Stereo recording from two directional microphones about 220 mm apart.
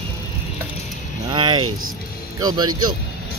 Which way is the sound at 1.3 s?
20° right (ahead or behind).